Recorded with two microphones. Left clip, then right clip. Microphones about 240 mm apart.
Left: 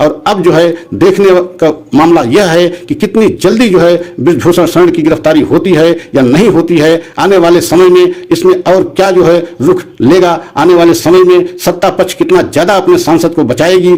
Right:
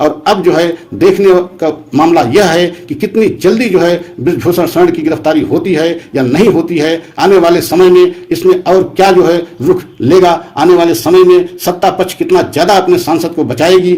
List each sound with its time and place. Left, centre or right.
0.0 s a man's voice: left